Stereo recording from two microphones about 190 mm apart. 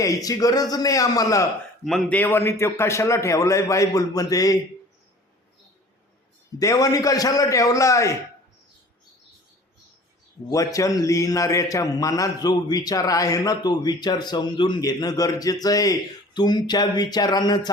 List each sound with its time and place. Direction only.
0.0 s a man's voice: 20° left (ahead or behind)
1.8 s a man's voice: centre (ahead or behind); by 4.6 s 20° left (ahead or behind)
6.6 s a man's voice: 20° left (ahead or behind)
10.5 s a man's voice: 15° left (ahead or behind)